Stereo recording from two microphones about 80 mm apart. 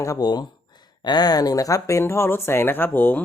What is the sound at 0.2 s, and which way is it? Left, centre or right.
Speech, left.